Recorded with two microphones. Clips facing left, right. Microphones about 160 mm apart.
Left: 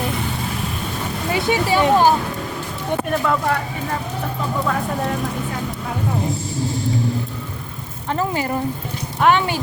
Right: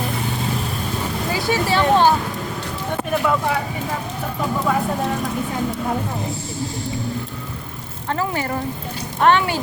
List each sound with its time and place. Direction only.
1.3 s speech: 20° left (ahead or behind)
3.1 s speech: 5° right (ahead or behind)
8.1 s a woman's voice: 20° left (ahead or behind)
9.2 s speech: centre (ahead or behind)